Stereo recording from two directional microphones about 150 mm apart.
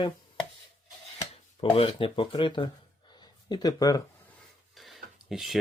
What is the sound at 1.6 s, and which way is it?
Speech, 35° left (ahead or behind).